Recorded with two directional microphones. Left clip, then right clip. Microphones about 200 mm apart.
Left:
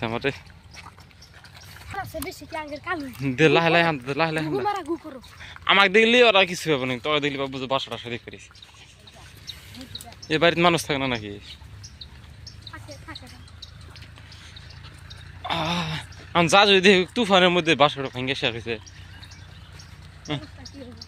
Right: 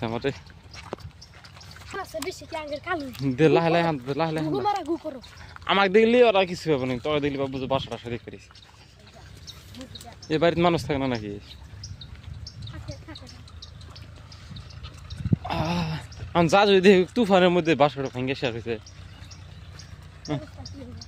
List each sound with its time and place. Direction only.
0.0 s speech: 5° right (ahead or behind)
3.2 s a man's voice: 10° right (ahead or behind)
4.6 s speech: 65° right (ahead or behind)
5.4 s a man's voice: 15° right (ahead or behind)
10.2 s a man's voice: 10° right (ahead or behind)
15.4 s speech: 15° right (ahead or behind)